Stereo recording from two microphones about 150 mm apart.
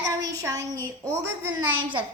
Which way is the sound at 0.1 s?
25° right (ahead or behind).